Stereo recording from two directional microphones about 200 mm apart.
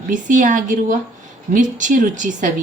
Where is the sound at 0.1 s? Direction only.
40° right (ahead or behind).